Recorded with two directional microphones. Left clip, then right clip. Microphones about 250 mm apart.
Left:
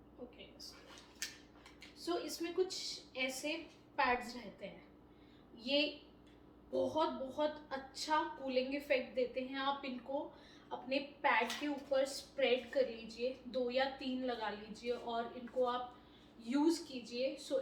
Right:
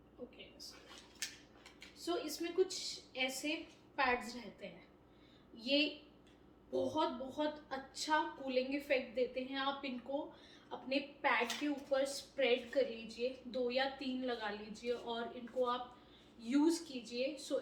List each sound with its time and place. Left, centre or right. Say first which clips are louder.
2.0 s a woman's voice: even; centre